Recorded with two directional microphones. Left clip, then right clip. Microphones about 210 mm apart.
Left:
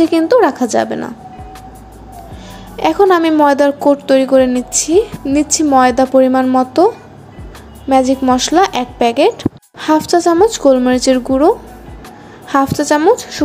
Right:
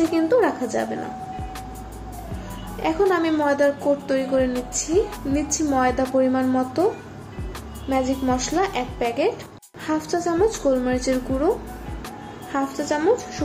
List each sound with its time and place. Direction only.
0.1 s speech: 50° left (ahead or behind)
2.8 s speech: 50° left (ahead or behind)
7.9 s speech: 50° left (ahead or behind)
12.5 s speech: 50° left (ahead or behind)